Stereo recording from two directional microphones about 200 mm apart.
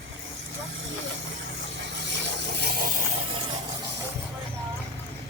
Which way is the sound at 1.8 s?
60° right (ahead or behind).